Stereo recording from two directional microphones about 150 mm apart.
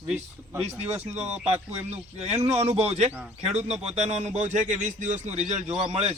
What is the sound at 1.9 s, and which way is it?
A man's voice, 45° right (ahead or behind).